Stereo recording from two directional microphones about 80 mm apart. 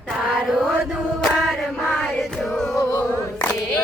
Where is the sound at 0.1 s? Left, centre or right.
Centre.